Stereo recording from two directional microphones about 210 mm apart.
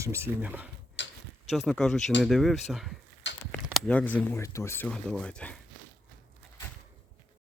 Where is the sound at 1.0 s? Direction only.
60° left (ahead or behind).